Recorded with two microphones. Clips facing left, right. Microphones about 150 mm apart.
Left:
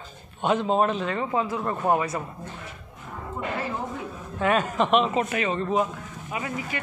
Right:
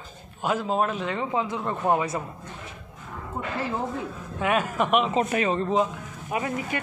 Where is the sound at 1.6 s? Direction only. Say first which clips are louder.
Right 1 dB; 5° left (ahead or behind).